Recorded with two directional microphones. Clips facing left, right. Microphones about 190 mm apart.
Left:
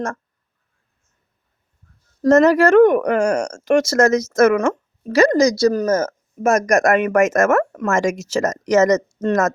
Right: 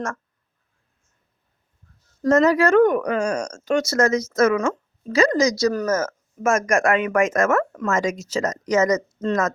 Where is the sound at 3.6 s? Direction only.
90° left; by 5.4 s 65° left (ahead or behind).